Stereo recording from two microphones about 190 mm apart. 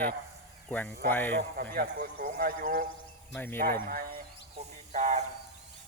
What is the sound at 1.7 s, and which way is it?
A man's voice, 50° right (ahead or behind).